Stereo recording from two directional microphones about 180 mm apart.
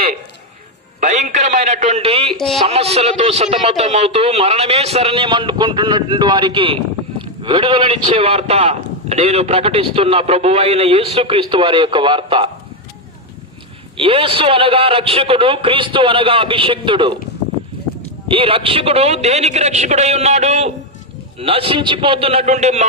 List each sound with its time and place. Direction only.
0.9 s a man's voice: 40° right (ahead or behind)
13.9 s a man's voice: 30° right (ahead or behind)
18.3 s a man's voice: 30° right (ahead or behind)